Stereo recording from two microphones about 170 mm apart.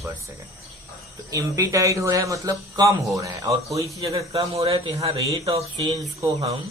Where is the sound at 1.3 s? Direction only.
20° right (ahead or behind).